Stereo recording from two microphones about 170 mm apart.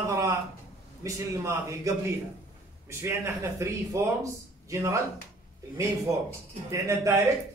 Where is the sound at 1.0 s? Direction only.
15° right (ahead or behind).